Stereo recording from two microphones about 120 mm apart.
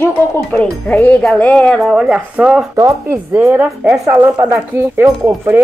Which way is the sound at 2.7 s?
25° right (ahead or behind).